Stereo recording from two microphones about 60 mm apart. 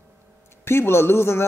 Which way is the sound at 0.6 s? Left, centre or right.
Left.